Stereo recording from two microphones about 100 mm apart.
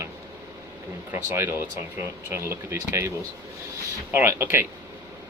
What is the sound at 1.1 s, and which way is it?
Speech, 25° right (ahead or behind).